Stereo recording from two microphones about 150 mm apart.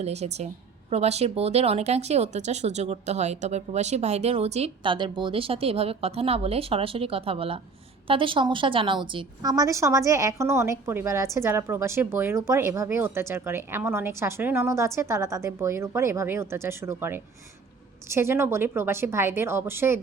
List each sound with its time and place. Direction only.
0.0 s a woman's voice: 45° right (ahead or behind); by 20.0 s 15° right (ahead or behind)